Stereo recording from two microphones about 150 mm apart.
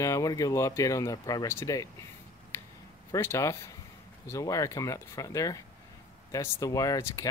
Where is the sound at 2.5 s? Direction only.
15° left (ahead or behind).